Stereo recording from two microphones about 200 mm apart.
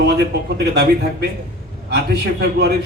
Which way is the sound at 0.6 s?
55° right (ahead or behind).